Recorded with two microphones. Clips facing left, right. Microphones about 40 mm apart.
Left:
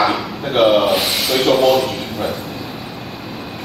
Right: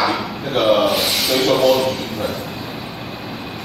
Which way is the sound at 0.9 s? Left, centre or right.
Centre.